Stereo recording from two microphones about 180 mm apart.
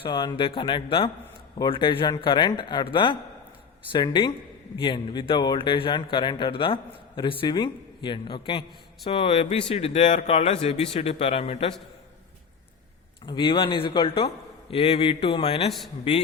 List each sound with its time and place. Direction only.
0.0 s speech: 25° left (ahead or behind)
13.2 s speech: 25° left (ahead or behind)